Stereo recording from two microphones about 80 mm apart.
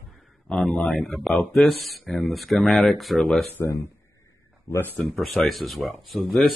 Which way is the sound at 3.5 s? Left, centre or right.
Left.